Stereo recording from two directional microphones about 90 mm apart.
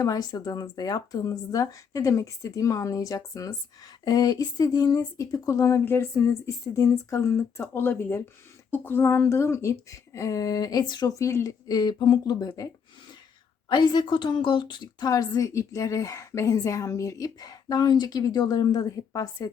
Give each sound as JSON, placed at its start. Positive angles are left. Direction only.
{"t": 0.0, "sound": "a woman's voice", "side_deg": 45}
{"t": 11.7, "sound": "a woman's voice", "side_deg": 50}
{"t": 13.7, "sound": "a woman's voice", "side_deg": 60}